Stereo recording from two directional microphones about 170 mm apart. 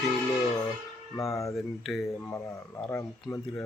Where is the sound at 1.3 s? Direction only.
20° left (ahead or behind).